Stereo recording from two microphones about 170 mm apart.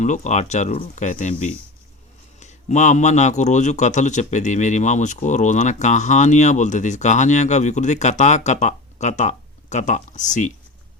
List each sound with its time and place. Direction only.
0.0 s a man's voice: 45° left (ahead or behind)